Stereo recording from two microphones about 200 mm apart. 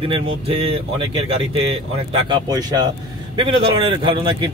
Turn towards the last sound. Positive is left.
turn(degrees=-25)  # may be behind; listen again after turning